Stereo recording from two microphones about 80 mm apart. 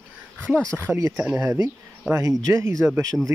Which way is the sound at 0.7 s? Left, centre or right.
Right.